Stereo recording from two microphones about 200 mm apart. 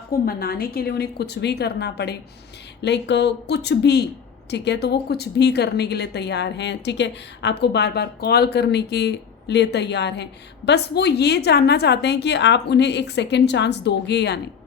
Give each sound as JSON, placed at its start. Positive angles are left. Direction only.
{"t": 0.1, "sound": "a woman's voice", "side_deg": 50}